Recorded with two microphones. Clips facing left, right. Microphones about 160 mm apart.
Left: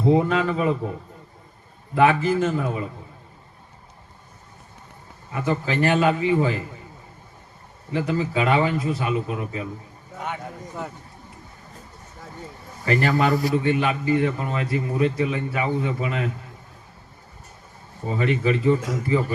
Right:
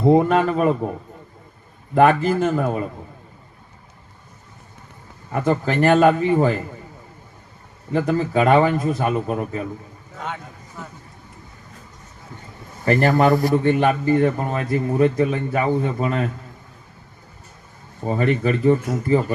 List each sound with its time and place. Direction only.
0.1 s a man's voice: 55° right (ahead or behind)
2.0 s a man's voice: 55° right (ahead or behind)
5.3 s a man's voice: 50° right (ahead or behind)
7.9 s a man's voice: 50° right (ahead or behind)
12.8 s a man's voice: 50° right (ahead or behind)
18.1 s a man's voice: 45° right (ahead or behind)